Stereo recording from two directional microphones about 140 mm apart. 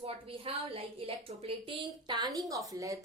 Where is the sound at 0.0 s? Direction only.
40° right (ahead or behind).